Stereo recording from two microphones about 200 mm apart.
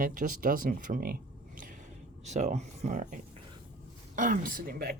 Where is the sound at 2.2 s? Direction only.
35° right (ahead or behind).